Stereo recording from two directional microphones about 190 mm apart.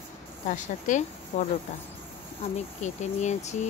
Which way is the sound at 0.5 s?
40° left (ahead or behind).